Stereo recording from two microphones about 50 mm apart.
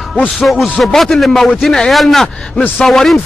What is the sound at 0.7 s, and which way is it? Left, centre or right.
A man's voice, centre.